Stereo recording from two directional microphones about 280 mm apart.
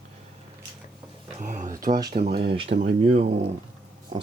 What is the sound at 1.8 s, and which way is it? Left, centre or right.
Speech, right.